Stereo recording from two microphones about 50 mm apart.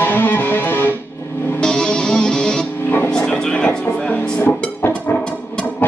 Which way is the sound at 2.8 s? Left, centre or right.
Left.